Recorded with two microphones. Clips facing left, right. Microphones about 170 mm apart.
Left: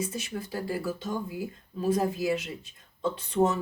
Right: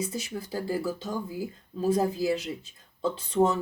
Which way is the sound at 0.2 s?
30° right (ahead or behind).